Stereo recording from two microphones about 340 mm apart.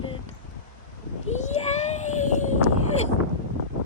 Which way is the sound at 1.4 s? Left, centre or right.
Centre.